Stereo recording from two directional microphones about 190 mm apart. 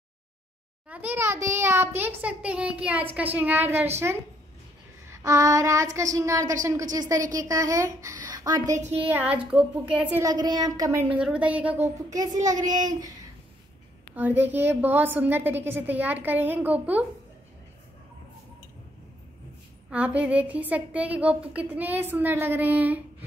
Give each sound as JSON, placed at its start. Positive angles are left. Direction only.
{"t": 0.8, "sound": "a woman's voice", "side_deg": -10}
{"t": 5.1, "sound": "child singing", "side_deg": -15}
{"t": 6.1, "sound": "a woman's voice", "side_deg": -15}
{"t": 9.1, "sound": "a woman's voice", "side_deg": -10}
{"t": 10.2, "sound": "speech", "side_deg": -20}
{"t": 11.1, "sound": "a woman's voice", "side_deg": -5}
{"t": 14.1, "sound": "a woman's voice", "side_deg": -10}
{"t": 19.9, "sound": "a woman's voice", "side_deg": -5}